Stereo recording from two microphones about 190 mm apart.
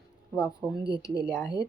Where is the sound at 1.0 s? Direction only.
15° left (ahead or behind).